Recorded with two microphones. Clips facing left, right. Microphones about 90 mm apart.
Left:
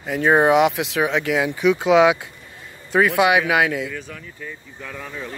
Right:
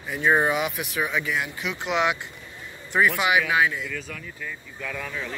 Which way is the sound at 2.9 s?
90° left.